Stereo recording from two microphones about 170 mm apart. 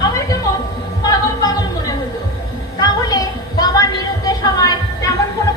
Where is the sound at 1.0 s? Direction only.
20° left (ahead or behind).